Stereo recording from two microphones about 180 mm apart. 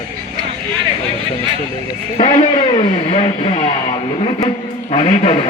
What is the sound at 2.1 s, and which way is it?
Speech, 35° left (ahead or behind).